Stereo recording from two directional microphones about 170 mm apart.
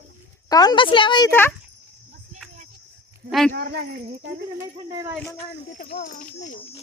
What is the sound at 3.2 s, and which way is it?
Speech, centre (ahead or behind).